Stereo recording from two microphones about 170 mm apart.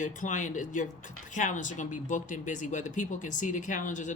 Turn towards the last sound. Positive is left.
turn(degrees=45)  # may be behind; listen again after turning